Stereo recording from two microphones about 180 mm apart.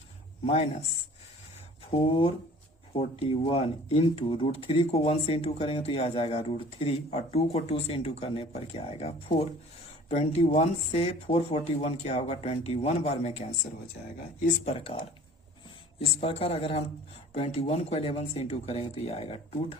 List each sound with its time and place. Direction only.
0.4 s speech: 35° left (ahead or behind)
1.9 s speech: 30° left (ahead or behind)